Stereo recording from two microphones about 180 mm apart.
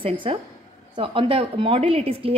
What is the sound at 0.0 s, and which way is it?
A woman's voice, 30° right (ahead or behind).